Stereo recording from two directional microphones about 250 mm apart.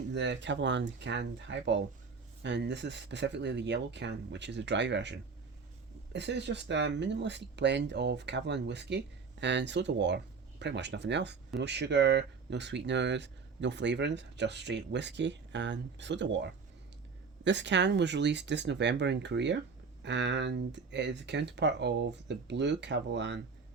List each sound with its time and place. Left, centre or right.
0.1 s speech: right
6.1 s speech: right